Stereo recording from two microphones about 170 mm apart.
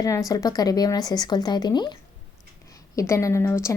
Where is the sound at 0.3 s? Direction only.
20° left (ahead or behind).